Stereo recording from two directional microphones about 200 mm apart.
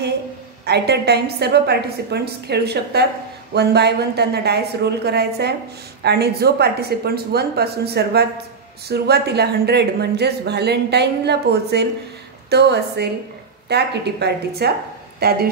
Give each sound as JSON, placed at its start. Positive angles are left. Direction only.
{"t": 0.7, "sound": "speech", "side_deg": -55}